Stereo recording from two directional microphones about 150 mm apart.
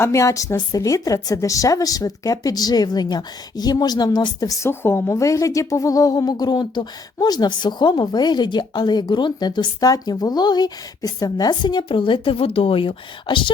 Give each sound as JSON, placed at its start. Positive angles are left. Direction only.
{"t": 0.0, "sound": "a woman's voice", "side_deg": 20}